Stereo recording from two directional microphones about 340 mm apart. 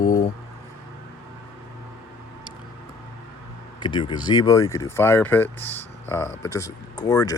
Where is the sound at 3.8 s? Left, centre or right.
Centre.